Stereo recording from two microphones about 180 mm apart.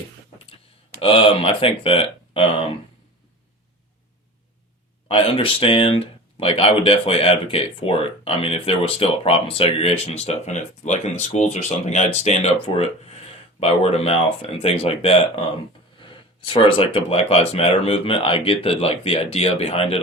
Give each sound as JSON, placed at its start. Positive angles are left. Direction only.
{"t": 1.0, "sound": "speech", "side_deg": 30}
{"t": 5.0, "sound": "speech", "side_deg": 30}